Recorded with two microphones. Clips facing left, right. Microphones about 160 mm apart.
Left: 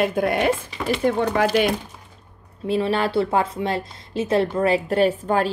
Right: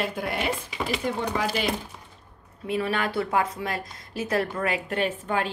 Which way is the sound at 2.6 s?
30° left (ahead or behind).